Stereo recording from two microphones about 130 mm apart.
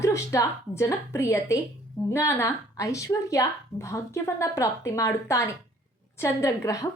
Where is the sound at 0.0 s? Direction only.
20° left (ahead or behind).